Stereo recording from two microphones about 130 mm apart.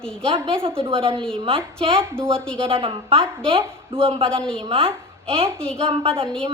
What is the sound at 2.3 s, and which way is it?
Speech, 5° left (ahead or behind).